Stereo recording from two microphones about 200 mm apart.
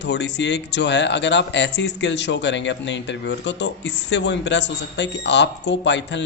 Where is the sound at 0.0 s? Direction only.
60° left (ahead or behind).